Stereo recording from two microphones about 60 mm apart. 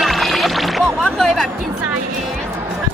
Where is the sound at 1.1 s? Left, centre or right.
Centre.